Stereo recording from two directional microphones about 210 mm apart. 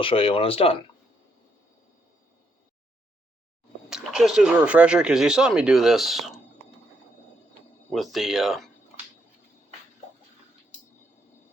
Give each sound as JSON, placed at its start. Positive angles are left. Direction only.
{"t": 0.0, "sound": "speech", "side_deg": 25}
{"t": 3.8, "sound": "speech", "side_deg": -5}
{"t": 7.9, "sound": "speech", "side_deg": 0}